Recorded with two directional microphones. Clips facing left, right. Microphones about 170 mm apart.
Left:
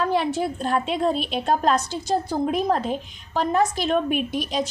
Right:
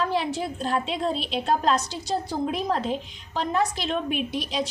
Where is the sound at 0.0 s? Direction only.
55° left (ahead or behind).